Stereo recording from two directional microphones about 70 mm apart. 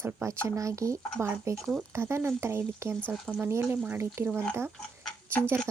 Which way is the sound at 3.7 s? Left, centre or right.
Right.